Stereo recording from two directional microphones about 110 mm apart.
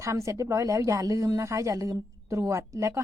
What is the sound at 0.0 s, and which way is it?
Speech, 30° right (ahead or behind).